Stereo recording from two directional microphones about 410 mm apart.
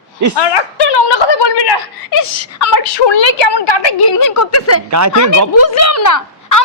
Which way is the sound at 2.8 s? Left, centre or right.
Left.